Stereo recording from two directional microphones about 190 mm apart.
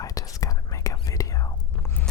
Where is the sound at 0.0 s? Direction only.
20° left (ahead or behind).